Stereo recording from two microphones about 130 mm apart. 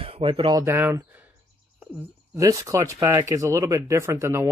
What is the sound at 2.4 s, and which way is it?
Speech, 25° right (ahead or behind).